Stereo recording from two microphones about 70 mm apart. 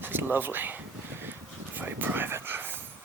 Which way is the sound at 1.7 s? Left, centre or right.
Right.